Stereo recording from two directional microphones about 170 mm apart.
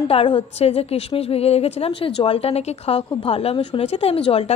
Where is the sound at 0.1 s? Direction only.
35° left (ahead or behind).